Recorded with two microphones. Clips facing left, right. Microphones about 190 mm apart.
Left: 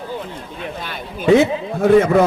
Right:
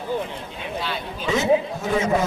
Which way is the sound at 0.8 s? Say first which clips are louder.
Even; 55° left (ahead or behind).